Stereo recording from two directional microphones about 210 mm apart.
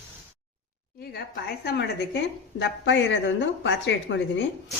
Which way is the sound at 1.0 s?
50° left (ahead or behind).